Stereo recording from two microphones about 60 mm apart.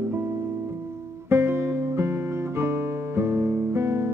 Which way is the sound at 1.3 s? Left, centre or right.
Right.